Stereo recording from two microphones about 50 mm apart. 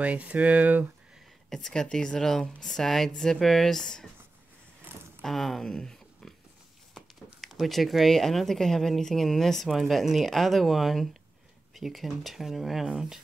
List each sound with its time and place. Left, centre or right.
0.0 s speech: right
1.5 s speech: centre
5.2 s speech: centre
5.7 s a sound: centre
7.3 s speech: centre